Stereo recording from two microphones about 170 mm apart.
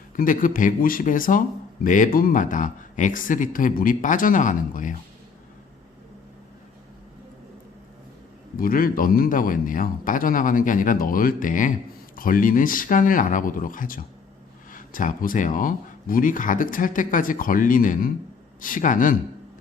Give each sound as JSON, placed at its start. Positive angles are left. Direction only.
{"t": 0.2, "sound": "speech", "side_deg": 55}
{"t": 8.5, "sound": "a man's voice", "side_deg": 55}